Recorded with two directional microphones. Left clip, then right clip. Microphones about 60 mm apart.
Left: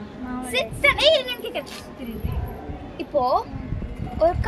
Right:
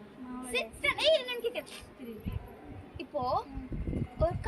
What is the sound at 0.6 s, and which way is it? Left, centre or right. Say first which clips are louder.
Speech: left 12 dB; left.